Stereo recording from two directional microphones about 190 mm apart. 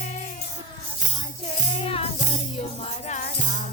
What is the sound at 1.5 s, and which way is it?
Music, 30° left (ahead or behind).